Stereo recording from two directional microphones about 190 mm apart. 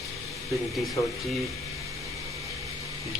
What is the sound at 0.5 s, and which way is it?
Speech, centre (ahead or behind).